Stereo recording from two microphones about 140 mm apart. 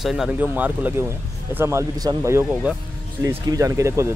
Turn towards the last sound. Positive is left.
turn(degrees=-20)  # may be behind; listen again after turning